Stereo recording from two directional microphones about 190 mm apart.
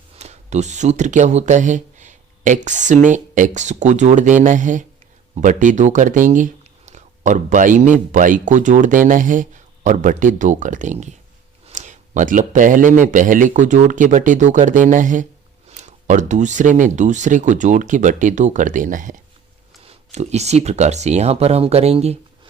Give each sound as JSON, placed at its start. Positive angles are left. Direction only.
{"t": 0.2, "sound": "speech", "side_deg": -35}